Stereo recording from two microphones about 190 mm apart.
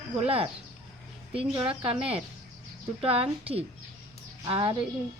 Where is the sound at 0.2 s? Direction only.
30° right (ahead or behind).